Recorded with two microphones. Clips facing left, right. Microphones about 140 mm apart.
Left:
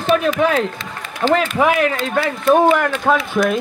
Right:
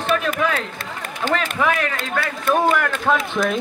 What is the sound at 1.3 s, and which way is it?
Speech, 30° left (ahead or behind).